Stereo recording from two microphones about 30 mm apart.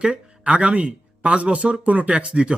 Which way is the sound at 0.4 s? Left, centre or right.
Right.